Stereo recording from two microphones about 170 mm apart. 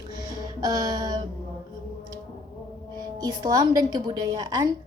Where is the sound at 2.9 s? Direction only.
25° right (ahead or behind).